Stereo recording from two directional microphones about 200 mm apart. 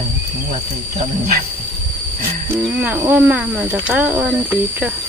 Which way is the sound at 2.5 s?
10° right (ahead or behind).